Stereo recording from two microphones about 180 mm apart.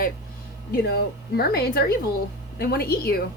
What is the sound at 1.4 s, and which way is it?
A woman's voice, 60° left (ahead or behind).